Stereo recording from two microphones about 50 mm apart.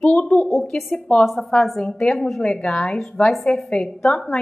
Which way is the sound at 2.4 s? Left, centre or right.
Centre.